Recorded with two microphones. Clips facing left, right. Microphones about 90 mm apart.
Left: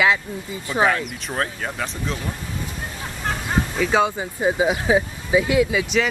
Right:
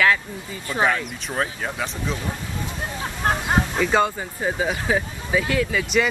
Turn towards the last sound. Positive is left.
turn(degrees=10)  # may be behind; listen again after turning